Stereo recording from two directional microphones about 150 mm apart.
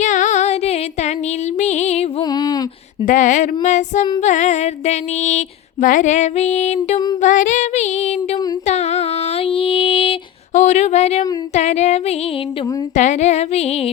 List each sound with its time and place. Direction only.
0.0 s music: 55° left (ahead or behind)
2.3 s a sound: 25° left (ahead or behind)
3.1 s speech: 60° left (ahead or behind)
7.2 s female singing: 55° left (ahead or behind); by 10.2 s 40° left (ahead or behind)
10.5 s speech: 50° left (ahead or behind)